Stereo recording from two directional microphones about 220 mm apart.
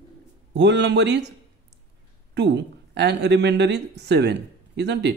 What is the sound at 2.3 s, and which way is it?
Speech, 50° right (ahead or behind).